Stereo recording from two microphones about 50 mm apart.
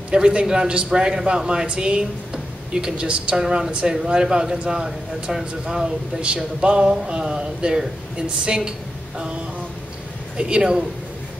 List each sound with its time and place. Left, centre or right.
0.1 s speech: centre
3.3 s speech: centre
6.2 s a sound: centre
7.1 s speech: centre
10.3 s speech: centre